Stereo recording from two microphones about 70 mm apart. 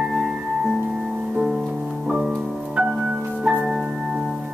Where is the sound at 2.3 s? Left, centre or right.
Centre.